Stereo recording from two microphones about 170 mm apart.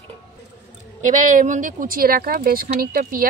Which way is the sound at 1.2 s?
45° right (ahead or behind).